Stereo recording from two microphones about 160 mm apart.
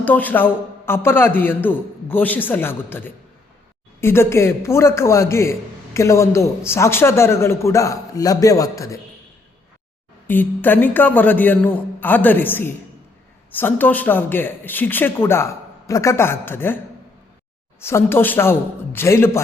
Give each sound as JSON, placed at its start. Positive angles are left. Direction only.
{"t": 0.0, "sound": "a man's voice", "side_deg": 10}
{"t": 10.2, "sound": "a man's voice", "side_deg": 10}